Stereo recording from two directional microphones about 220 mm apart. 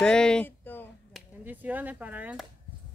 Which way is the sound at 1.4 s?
10° right (ahead or behind).